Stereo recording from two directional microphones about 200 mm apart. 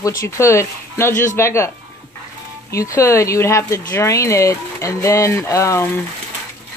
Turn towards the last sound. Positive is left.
turn(degrees=15)  # may be behind; listen again after turning